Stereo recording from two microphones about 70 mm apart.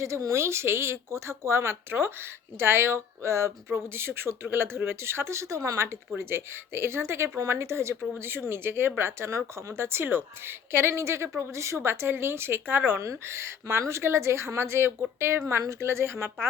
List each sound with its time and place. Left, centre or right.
0.0 s a woman's voice: right
13.0 s a woman's voice: right